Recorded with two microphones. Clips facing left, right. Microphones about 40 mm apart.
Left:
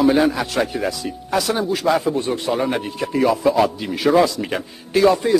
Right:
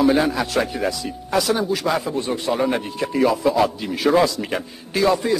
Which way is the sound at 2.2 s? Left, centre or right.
Left.